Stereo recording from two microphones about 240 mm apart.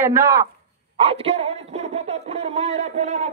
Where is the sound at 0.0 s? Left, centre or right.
Centre.